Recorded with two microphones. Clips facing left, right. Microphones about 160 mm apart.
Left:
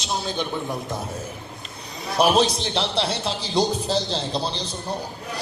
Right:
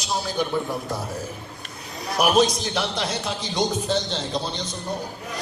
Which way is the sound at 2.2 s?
30° left (ahead or behind).